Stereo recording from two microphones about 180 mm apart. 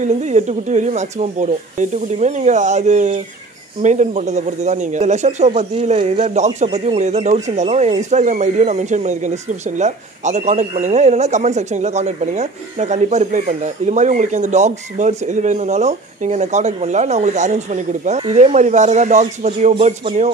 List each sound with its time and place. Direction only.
0.0 s speech: 40° right (ahead or behind)